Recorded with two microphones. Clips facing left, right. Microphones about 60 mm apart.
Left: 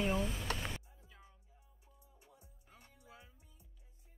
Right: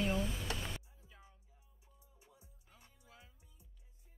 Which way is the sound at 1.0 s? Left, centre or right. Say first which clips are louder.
Even; centre.